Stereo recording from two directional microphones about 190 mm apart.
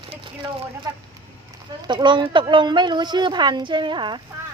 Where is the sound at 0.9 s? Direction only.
15° right (ahead or behind).